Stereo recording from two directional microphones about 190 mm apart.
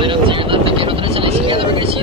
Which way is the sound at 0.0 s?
25° right (ahead or behind).